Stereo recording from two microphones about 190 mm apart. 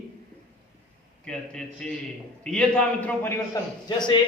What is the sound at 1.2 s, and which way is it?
A man's voice, 5° left (ahead or behind).